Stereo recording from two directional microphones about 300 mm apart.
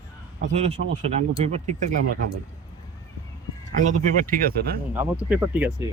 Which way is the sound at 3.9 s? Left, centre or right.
Right.